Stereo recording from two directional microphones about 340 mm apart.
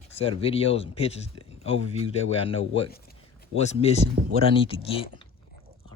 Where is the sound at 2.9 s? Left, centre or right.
Left.